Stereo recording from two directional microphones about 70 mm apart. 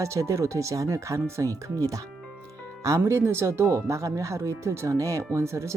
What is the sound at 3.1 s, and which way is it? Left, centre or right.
Speech, right.